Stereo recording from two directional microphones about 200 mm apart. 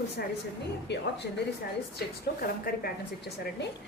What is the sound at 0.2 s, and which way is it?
Speech, 50° left (ahead or behind).